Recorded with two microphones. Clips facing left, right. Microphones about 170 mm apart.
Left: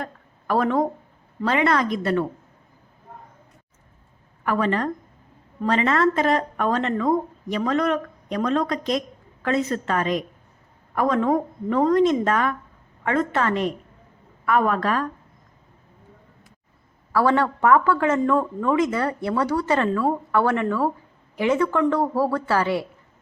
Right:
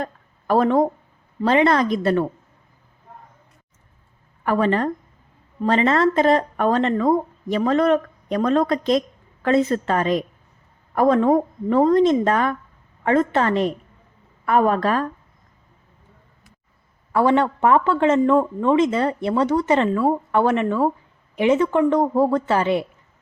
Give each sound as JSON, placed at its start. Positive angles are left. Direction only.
{"t": 0.0, "sound": "a sound", "side_deg": -25}
{"t": 1.4, "sound": "speech", "side_deg": -25}
{"t": 4.4, "sound": "speech", "side_deg": -30}
{"t": 17.1, "sound": "speech", "side_deg": -20}